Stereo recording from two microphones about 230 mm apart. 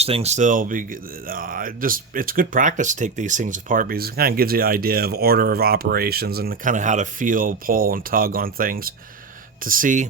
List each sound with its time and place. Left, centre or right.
0.0 s speech: right